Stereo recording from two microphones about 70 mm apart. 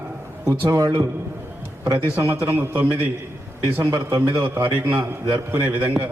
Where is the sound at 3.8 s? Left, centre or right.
Right.